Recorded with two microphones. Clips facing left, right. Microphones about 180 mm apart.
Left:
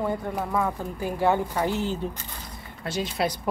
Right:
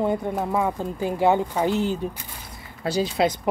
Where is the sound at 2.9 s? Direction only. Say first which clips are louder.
Right 5 dB; 35° right (ahead or behind).